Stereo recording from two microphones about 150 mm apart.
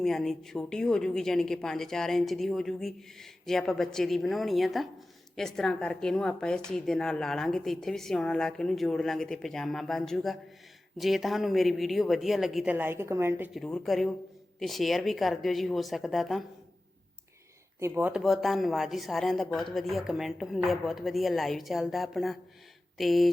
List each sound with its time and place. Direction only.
0.0 s a woman's voice: centre (ahead or behind)
12.7 s a woman's voice: 15° right (ahead or behind)
13.5 s a woman's voice: 5° left (ahead or behind)
17.7 s a woman's voice: 15° right (ahead or behind)
18.1 s a woman's voice: centre (ahead or behind)